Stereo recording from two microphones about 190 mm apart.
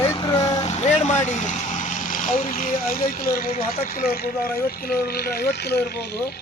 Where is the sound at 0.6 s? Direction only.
35° left (ahead or behind).